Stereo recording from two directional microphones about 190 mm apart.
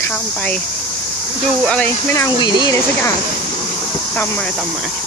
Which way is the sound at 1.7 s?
10° left (ahead or behind).